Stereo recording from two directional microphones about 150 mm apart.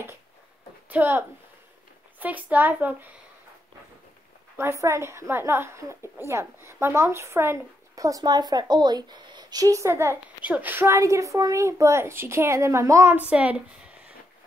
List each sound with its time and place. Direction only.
0.8 s a woman's voice: 15° right (ahead or behind)
4.6 s a woman's voice: 20° right (ahead or behind)
13.3 s a woman's voice: 10° right (ahead or behind)